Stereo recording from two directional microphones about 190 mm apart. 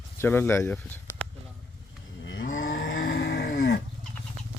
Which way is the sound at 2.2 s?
80° left.